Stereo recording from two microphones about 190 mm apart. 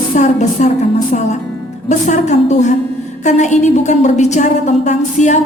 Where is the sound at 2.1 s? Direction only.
40° left (ahead or behind).